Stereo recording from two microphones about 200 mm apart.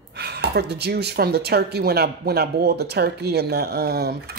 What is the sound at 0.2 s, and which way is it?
Speech, 55° right (ahead or behind).